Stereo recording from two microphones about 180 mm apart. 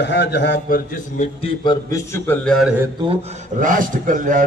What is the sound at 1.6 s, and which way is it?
Speech, 15° left (ahead or behind).